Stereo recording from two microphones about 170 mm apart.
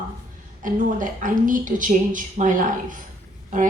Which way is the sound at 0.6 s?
50° right (ahead or behind).